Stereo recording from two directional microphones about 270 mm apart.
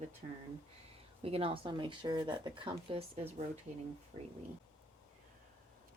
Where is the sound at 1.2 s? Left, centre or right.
Right.